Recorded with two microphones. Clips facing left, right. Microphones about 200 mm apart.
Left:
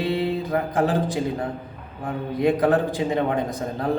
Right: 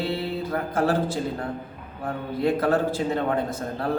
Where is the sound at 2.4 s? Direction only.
15° left (ahead or behind).